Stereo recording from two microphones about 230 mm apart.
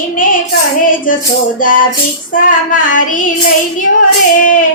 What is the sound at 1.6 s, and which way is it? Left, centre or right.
Child singing, left.